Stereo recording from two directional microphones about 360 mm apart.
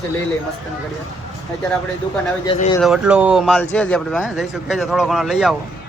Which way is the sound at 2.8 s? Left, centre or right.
Centre.